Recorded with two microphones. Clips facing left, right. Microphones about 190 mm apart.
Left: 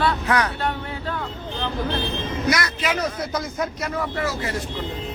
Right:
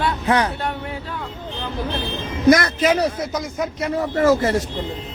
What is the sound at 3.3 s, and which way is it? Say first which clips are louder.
Speech: right 2 dB; 15° right (ahead or behind).